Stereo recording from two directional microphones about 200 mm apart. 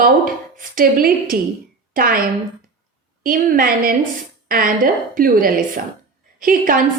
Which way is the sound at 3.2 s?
45° right (ahead or behind).